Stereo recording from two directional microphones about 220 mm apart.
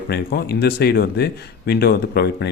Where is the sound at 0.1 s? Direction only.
45° left (ahead or behind).